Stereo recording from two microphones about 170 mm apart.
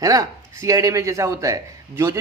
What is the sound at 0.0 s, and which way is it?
A man's voice, 20° right (ahead or behind).